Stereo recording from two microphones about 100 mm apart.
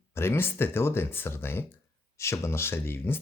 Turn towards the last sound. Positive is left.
turn(degrees=25)  # may be behind; listen again after turning